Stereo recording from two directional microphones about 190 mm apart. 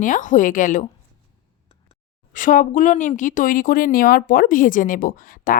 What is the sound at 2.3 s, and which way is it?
A woman's voice, 45° left (ahead or behind).